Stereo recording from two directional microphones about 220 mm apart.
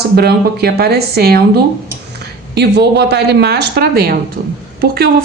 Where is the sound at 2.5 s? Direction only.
50° right (ahead or behind).